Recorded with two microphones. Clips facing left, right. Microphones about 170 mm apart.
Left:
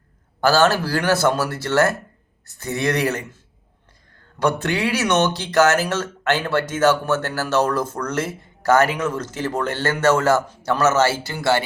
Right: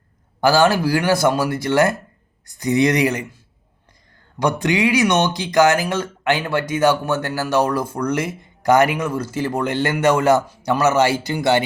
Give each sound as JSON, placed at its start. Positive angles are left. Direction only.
{"t": 0.4, "sound": "speech", "side_deg": -10}
{"t": 4.4, "sound": "speech", "side_deg": -15}